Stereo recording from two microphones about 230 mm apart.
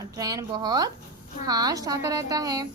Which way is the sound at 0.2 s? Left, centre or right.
Centre.